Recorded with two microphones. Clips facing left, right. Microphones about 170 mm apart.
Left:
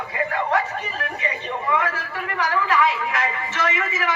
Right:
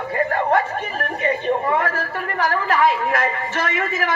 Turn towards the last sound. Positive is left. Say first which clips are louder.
# right 2 dB
turn(degrees=-50)  # may be behind; listen again after turning